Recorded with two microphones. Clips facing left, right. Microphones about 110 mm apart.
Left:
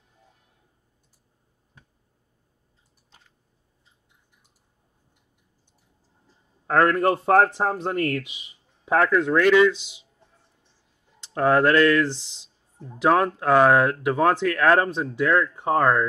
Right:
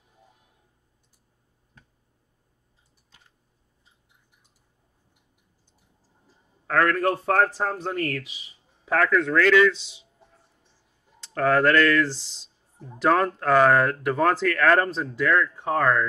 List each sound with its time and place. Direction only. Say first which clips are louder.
6.7 s a man's voice: left 3 dB; 20° left (ahead or behind)
11.3 s speech: left 1 dB; 15° left (ahead or behind)
12.7 s speech: left 2 dB; 5° right (ahead or behind)
13.0 s speech: left 1 dB; 10° left (ahead or behind)